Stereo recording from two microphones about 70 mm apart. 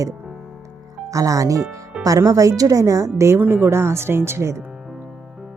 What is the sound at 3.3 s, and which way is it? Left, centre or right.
Speech, right.